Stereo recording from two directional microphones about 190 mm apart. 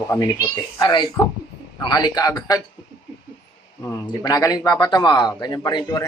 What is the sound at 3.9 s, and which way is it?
Speech, 20° left (ahead or behind).